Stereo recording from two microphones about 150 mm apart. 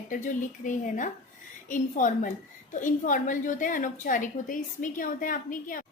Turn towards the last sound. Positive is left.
turn(degrees=65)  # may be behind; listen again after turning